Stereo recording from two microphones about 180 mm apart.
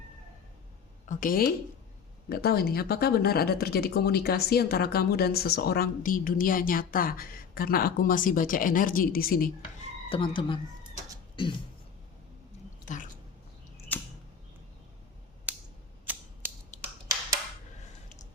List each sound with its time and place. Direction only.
1.0 s speech: 45° left (ahead or behind)
10.1 s speech: 30° left (ahead or behind)
13.9 s arrow: 10° left (ahead or behind)
16.1 s typewriter: 10° right (ahead or behind)
16.7 s a sound: 40° left (ahead or behind)